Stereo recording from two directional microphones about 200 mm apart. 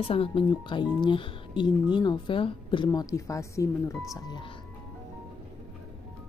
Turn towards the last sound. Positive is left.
turn(degrees=25)  # may be behind; listen again after turning